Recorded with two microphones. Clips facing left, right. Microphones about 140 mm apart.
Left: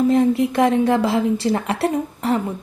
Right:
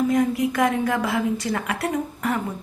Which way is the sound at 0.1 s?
30° left (ahead or behind).